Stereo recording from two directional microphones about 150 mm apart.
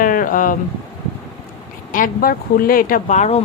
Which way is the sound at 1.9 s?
70° left (ahead or behind).